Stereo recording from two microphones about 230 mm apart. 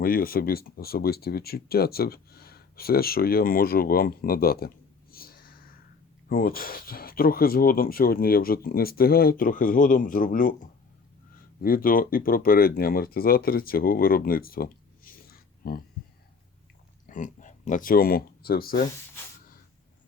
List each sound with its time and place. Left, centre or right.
0.0 s speech: left
5.1 s a sound: left
6.2 s speech: left
11.6 s speech: left
17.1 s speech: left